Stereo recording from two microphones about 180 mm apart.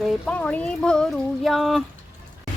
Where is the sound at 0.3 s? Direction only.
5° left (ahead or behind).